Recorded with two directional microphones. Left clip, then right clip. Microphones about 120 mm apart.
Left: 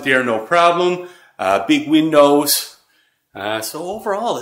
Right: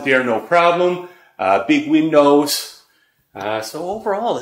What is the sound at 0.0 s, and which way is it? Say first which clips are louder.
Speech: even; 30° left (ahead or behind).